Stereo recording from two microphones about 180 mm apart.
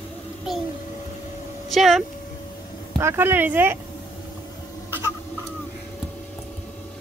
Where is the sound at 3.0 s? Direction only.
15° right (ahead or behind).